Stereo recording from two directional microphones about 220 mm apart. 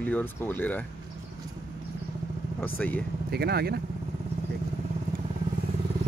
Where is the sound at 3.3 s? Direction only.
45° right (ahead or behind).